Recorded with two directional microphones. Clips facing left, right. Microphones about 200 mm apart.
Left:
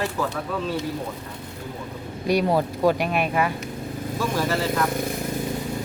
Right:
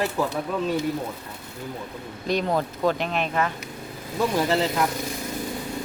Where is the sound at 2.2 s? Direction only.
10° left (ahead or behind).